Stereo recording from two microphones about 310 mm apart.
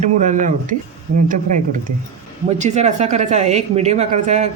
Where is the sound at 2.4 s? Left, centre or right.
Right.